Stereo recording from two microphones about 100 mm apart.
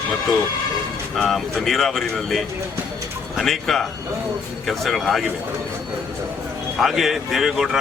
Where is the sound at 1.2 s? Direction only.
Centre (ahead or behind).